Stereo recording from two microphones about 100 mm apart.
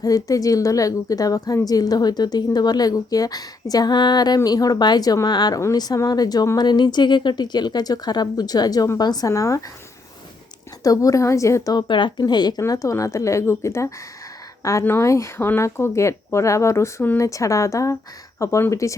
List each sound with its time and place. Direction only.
0.0 s a woman's voice: 35° left (ahead or behind)
10.8 s a woman's voice: 35° left (ahead or behind)